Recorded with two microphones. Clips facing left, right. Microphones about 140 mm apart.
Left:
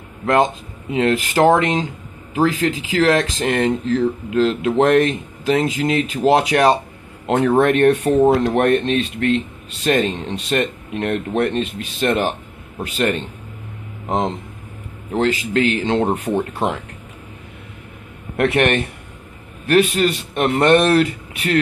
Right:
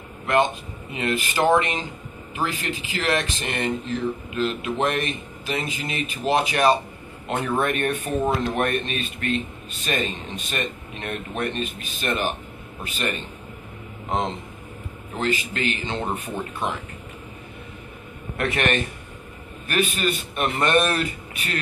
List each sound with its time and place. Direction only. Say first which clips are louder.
0.4 s speech: left 4 dB; 90° left
7.2 s speech: left 9 dB; 80° left
8.3 s speech: left 8 dB; 70° left (ahead or behind); by 9.4 s 90° left
9.8 s speech: left 9 dB; 75° left (ahead or behind)
15.1 s speech: left 8 dB; 90° left
18.4 s a man's voice: left 7 dB; 65° left (ahead or behind)
19.6 s speech: left 8 dB; 85° left